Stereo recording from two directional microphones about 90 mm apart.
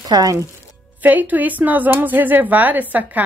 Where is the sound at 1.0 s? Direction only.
20° right (ahead or behind).